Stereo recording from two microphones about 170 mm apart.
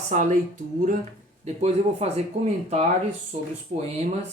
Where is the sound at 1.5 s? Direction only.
40° right (ahead or behind).